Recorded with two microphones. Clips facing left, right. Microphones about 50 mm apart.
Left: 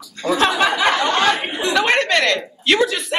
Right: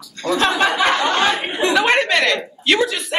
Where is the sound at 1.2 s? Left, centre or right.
Right.